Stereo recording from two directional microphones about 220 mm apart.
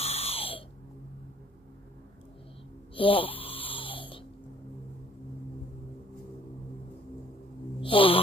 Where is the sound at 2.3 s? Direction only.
25° left (ahead or behind).